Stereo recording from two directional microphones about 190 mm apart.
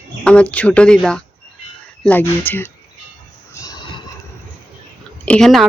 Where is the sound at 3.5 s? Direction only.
20° left (ahead or behind).